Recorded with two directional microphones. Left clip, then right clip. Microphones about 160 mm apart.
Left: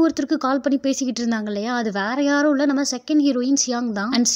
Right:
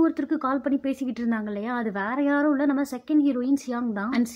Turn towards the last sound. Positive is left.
turn(degrees=20)  # may be behind; listen again after turning